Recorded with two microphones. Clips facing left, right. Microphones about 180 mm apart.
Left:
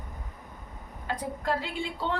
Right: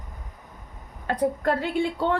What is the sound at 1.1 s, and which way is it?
Speech, 60° right (ahead or behind).